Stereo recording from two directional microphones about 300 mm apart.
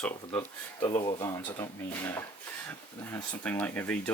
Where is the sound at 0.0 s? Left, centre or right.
Centre.